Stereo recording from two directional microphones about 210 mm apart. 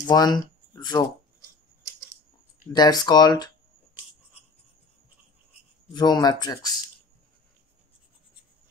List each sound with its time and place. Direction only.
0.0 s speech: 20° left (ahead or behind)
2.7 s speech: 20° left (ahead or behind)
5.9 s speech: 20° left (ahead or behind)